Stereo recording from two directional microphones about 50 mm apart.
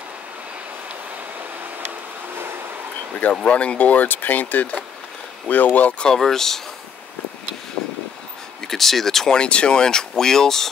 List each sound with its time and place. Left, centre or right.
3.4 s speech: left
5.9 s speech: centre
8.6 s speech: centre